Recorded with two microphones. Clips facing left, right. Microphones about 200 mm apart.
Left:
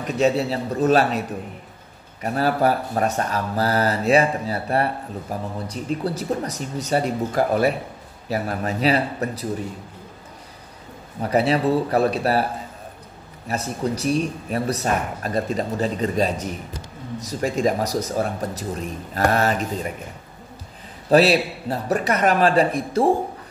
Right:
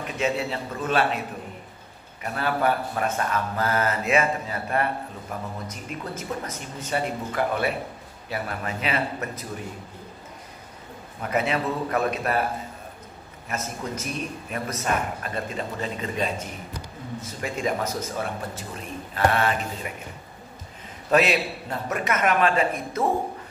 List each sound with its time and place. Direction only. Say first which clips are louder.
0.0 s speech: left 6 dB; 40° left (ahead or behind)
2.2 s speech: left 5 dB; 40° left (ahead or behind)
11.1 s speech: left 6 dB; 35° left (ahead or behind)
13.5 s speech: left 6 dB; 35° left (ahead or behind)
21.1 s speech: left 5 dB; 35° left (ahead or behind)